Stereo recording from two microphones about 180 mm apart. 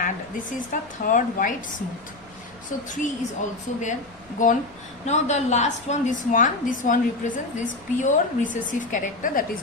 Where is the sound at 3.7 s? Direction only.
45° left (ahead or behind).